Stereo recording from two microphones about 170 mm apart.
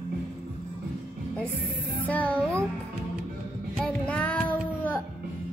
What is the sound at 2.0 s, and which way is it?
Music, 10° left (ahead or behind).